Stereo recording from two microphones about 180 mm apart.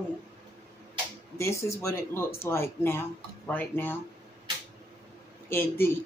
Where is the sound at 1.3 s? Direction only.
15° left (ahead or behind).